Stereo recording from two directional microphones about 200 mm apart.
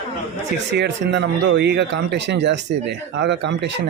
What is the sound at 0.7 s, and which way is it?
Speech, 60° right (ahead or behind).